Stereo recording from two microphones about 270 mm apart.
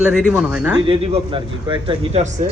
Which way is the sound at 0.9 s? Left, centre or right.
Right.